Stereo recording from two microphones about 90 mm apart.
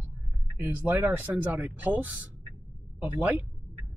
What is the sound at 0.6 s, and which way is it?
Speech, 20° right (ahead or behind).